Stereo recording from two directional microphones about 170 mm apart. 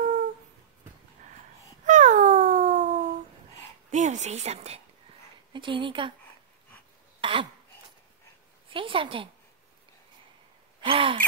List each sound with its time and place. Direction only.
1.9 s cat: 45° right (ahead or behind)
3.9 s a woman's voice: 45° right (ahead or behind)
5.5 s speech: 30° right (ahead or behind)
7.2 s a sound: 30° right (ahead or behind)
8.6 s a woman's voice: 30° right (ahead or behind)
10.8 s gasp: 30° right (ahead or behind)